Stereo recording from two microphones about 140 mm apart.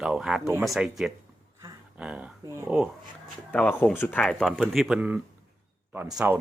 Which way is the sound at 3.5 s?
10° left (ahead or behind).